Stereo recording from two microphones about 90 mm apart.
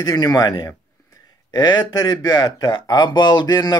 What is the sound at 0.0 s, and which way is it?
Speech, 45° left (ahead or behind).